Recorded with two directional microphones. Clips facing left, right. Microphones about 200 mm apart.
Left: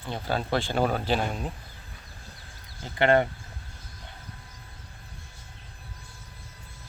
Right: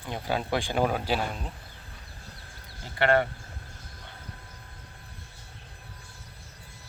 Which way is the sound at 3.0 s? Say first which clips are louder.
Left 2 dB; 20° left (ahead or behind).